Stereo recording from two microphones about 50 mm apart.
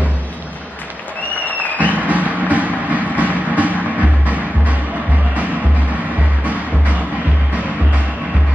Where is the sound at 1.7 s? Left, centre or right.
Right.